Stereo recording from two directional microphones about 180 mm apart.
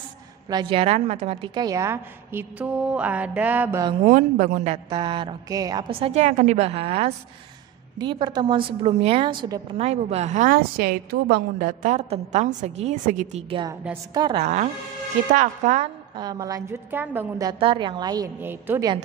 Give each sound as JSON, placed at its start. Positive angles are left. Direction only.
{"t": 0.5, "sound": "a woman's voice", "side_deg": -25}
{"t": 1.5, "sound": "a woman's voice", "side_deg": -20}
{"t": 4.0, "sound": "a woman's voice", "side_deg": -45}
{"t": 4.8, "sound": "a woman's voice", "side_deg": -25}
{"t": 13.5, "sound": "a woman's voice", "side_deg": -25}
{"t": 14.4, "sound": "a woman's voice", "side_deg": -40}
{"t": 16.2, "sound": "a woman's voice", "side_deg": -20}